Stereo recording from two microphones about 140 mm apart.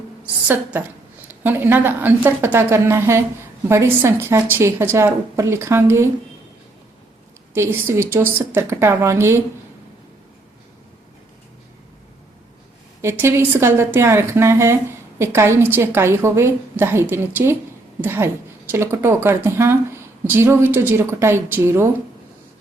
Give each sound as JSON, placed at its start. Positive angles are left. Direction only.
{"t": 0.4, "sound": "a woman's voice", "side_deg": -15}
{"t": 7.5, "sound": "a woman's voice", "side_deg": -15}
{"t": 13.0, "sound": "a woman's voice", "side_deg": -20}